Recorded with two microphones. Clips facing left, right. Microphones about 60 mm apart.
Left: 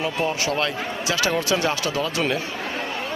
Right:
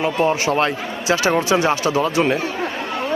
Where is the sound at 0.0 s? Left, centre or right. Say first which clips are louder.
Right 6 dB; right.